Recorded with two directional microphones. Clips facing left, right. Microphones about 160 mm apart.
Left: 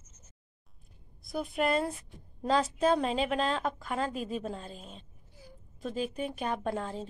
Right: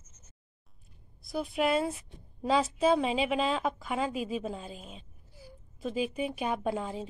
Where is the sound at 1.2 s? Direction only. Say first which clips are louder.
Right 1 dB; centre (ahead or behind).